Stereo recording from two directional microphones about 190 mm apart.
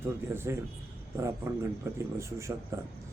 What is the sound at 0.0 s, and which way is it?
Speech, 10° right (ahead or behind).